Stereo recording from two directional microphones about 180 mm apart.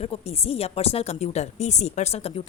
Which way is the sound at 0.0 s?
35° left (ahead or behind).